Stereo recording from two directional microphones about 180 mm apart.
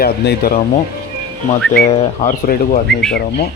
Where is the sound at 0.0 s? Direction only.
60° left (ahead or behind).